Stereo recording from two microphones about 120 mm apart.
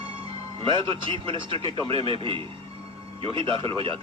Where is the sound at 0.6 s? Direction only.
45° right (ahead or behind).